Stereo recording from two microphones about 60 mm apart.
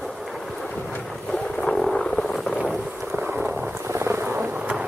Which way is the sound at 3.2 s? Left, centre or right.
Right.